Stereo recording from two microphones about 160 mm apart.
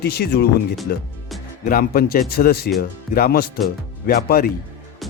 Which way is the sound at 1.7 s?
65° left (ahead or behind).